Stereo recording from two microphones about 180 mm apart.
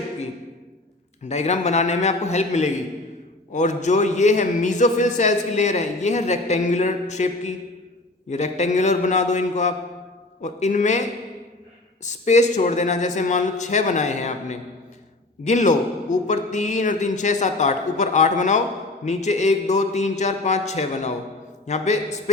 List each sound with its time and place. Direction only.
1.2 s a man's voice: 40° left (ahead or behind)
12.0 s a man's voice: 40° left (ahead or behind)